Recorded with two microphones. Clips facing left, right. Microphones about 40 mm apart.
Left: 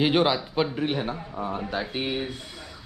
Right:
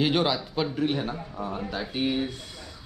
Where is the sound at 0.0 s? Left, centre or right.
Centre.